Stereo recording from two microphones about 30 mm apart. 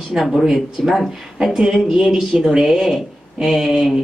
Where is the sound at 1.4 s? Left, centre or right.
Centre.